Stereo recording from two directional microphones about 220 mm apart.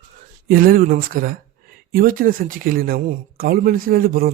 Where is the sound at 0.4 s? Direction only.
40° right (ahead or behind).